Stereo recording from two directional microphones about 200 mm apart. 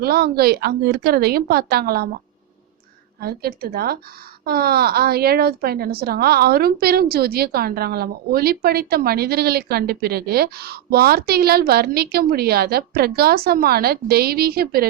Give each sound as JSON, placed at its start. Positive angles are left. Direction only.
{"t": 0.0, "sound": "a woman's voice", "side_deg": -50}
{"t": 3.2, "sound": "a woman's voice", "side_deg": -50}